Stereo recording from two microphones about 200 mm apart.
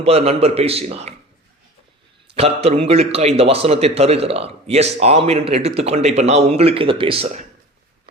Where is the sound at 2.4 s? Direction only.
30° right (ahead or behind).